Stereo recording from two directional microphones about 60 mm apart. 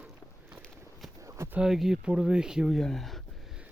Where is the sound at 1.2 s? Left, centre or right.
Right.